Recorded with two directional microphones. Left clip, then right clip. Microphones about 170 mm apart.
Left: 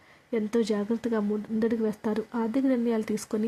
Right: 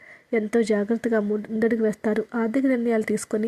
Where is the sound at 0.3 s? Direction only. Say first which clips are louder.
Right 5 dB; 20° right (ahead or behind).